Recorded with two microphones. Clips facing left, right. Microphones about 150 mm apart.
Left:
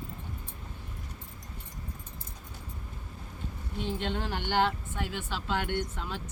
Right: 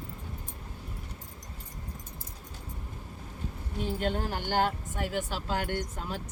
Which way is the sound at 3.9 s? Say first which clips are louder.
Right 4 dB; 45° right (ahead or behind).